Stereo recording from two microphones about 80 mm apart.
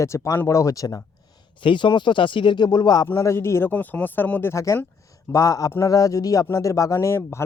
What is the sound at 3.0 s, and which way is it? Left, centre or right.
Speech, left.